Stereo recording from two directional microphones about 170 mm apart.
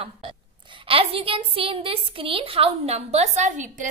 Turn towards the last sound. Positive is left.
turn(degrees=-45)  # may be behind; listen again after turning